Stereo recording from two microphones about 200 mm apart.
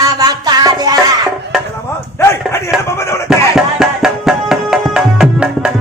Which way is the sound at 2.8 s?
15° left (ahead or behind).